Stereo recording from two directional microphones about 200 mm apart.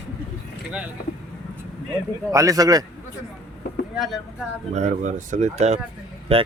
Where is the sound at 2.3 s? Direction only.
15° right (ahead or behind).